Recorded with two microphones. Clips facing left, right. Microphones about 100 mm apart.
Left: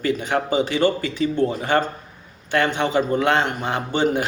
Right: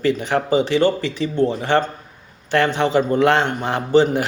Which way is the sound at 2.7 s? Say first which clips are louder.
Right 3 dB; 35° right (ahead or behind).